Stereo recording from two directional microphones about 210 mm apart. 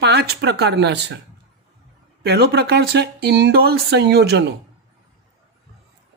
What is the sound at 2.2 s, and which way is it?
Speech, 50° right (ahead or behind).